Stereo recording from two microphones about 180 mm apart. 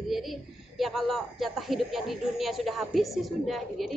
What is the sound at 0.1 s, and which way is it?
A man's voice, centre (ahead or behind).